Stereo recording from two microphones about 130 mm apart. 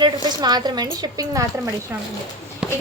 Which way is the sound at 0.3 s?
35° right (ahead or behind).